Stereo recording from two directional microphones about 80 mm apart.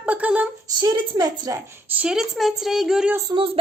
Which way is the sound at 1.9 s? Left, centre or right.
Centre.